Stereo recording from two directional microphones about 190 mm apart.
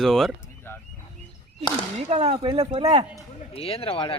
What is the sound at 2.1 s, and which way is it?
Speech, 30° right (ahead or behind).